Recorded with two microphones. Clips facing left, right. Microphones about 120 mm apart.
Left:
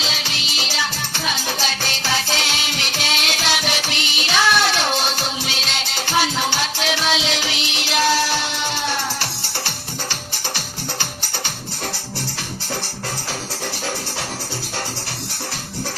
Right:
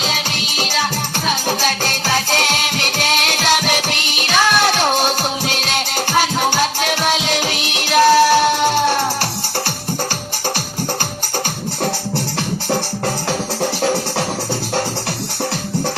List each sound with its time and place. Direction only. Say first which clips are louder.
0.0 s music: right 5 dB; 50° right (ahead or behind)